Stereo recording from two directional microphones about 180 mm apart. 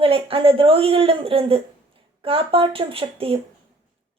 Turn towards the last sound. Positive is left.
turn(degrees=-30)  # may be behind; listen again after turning